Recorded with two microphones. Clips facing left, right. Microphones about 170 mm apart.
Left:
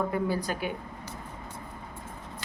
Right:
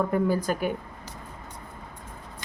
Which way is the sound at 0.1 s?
45° right (ahead or behind).